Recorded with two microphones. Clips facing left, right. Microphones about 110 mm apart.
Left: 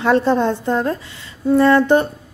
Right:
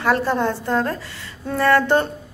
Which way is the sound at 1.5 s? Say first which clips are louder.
Left 4 dB; 20° left (ahead or behind).